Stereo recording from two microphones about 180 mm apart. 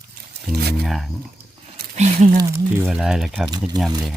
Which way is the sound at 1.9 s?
40° right (ahead or behind).